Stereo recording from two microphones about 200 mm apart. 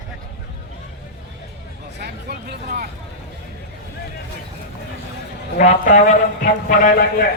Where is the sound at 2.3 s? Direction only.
55° right (ahead or behind).